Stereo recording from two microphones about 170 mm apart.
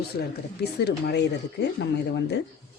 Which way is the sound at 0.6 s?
75° left (ahead or behind).